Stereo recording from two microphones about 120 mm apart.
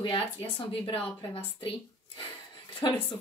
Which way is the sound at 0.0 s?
45° left (ahead or behind).